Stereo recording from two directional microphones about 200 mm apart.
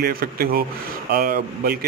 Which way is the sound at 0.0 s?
50° right (ahead or behind).